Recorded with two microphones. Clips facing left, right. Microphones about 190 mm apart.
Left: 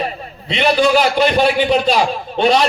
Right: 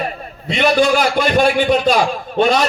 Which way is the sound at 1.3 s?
45° right (ahead or behind).